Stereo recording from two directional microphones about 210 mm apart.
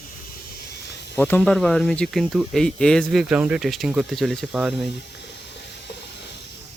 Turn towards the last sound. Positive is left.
turn(degrees=0)  # may be behind; listen again after turning